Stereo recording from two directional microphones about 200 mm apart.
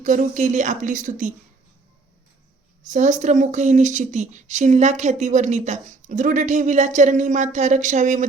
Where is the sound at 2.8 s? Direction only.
40° right (ahead or behind).